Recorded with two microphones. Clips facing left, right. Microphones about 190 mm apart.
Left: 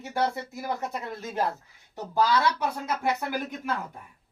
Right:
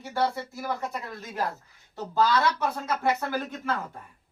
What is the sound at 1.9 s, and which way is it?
Speech, 15° left (ahead or behind).